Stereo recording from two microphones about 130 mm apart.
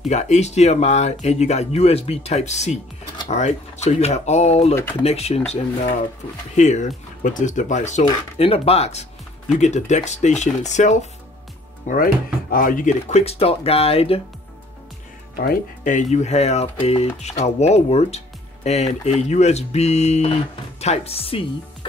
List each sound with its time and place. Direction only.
0.1 s speech: 60° left (ahead or behind)
7.2 s speech: 75° left (ahead or behind); by 9.0 s 55° left (ahead or behind)
9.5 s speech: 65° left (ahead or behind)
11.9 s speech: 90° left
13.2 s speech: 50° left (ahead or behind)
15.3 s speech: 80° left; by 21.5 s 45° left (ahead or behind)